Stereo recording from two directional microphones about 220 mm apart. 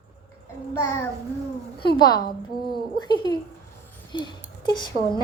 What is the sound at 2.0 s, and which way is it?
Speech, 20° left (ahead or behind).